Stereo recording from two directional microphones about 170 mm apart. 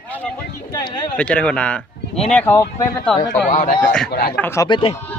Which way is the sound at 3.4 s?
50° left (ahead or behind).